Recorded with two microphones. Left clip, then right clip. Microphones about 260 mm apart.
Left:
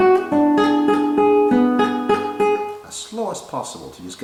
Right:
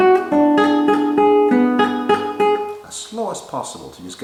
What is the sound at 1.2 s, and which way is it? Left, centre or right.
Music, centre.